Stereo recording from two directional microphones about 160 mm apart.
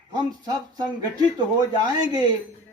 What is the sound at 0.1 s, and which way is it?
Speech, 25° right (ahead or behind).